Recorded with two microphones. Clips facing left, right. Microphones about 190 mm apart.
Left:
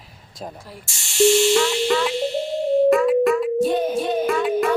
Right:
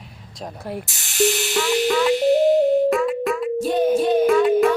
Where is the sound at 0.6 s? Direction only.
60° right (ahead or behind).